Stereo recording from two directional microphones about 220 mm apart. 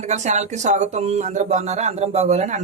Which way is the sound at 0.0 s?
30° right (ahead or behind).